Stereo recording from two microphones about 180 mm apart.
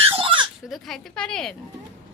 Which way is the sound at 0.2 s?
30° right (ahead or behind).